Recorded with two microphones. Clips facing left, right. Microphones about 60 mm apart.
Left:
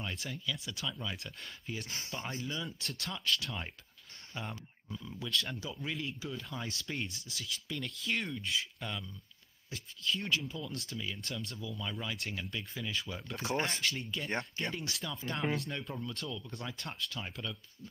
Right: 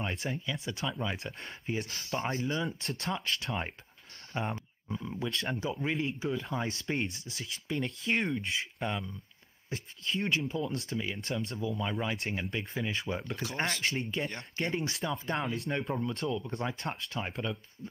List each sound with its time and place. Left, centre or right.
0.0 s speech: right
1.1 s speech: right
1.7 s speech: right
13.6 s speech: right